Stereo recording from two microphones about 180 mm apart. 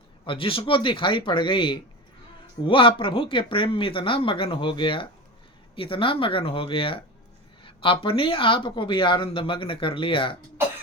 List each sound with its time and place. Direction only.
0.3 s speech: 30° left (ahead or behind)